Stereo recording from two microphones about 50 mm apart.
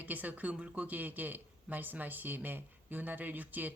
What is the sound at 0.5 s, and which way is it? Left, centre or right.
Speech, centre.